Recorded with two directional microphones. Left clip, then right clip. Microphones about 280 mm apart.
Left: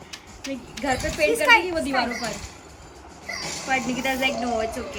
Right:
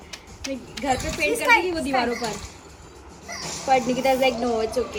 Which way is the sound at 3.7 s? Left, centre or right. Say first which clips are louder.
Right 5 dB; centre.